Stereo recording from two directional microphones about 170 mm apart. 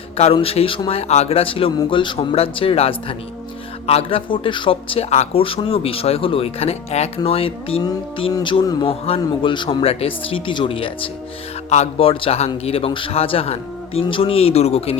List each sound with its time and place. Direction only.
0.3 s speech: 35° left (ahead or behind)
7.9 s speech: 20° left (ahead or behind); by 14.9 s 35° left (ahead or behind)